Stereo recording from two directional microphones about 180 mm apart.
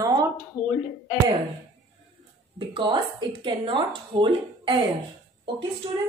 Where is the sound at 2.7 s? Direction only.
25° right (ahead or behind).